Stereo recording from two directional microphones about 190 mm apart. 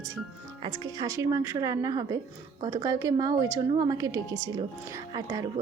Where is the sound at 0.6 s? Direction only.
15° right (ahead or behind).